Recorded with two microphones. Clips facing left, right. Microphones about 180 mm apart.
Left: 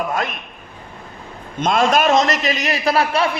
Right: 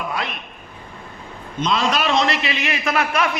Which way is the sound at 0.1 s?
45° left (ahead or behind).